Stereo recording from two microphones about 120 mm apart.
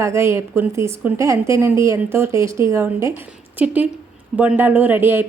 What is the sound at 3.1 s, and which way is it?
A woman's voice, 10° right (ahead or behind).